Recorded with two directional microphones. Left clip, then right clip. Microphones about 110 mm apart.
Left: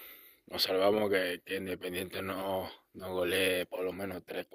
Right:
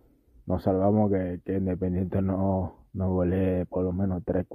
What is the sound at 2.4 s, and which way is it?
Speech, 5° right (ahead or behind).